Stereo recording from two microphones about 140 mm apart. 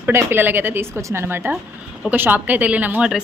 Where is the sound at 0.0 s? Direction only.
15° right (ahead or behind).